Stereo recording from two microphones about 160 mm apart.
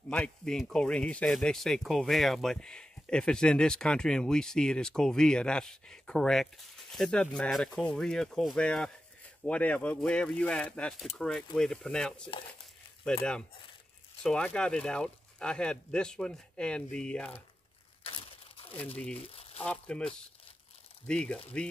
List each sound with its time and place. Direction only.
0.1 s speech: 5° left (ahead or behind)
18.0 s crumpling: 35° left (ahead or behind)
19.6 s speech: 5° left (ahead or behind)
21.1 s speech: 5° left (ahead or behind)